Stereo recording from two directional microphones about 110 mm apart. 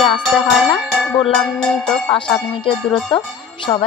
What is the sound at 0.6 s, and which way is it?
Music, centre (ahead or behind).